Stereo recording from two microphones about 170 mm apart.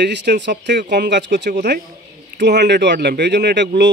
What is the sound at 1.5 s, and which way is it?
Speech, 70° right (ahead or behind).